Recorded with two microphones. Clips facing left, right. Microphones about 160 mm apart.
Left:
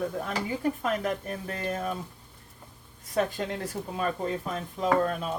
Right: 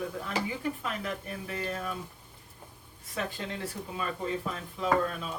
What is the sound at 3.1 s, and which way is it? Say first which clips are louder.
Speech: left 7 dB; 50° left (ahead or behind).